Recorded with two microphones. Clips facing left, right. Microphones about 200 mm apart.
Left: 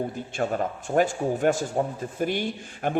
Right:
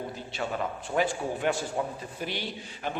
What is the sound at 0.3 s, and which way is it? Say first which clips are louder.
A man's voice: left 5 dB; 45° left (ahead or behind).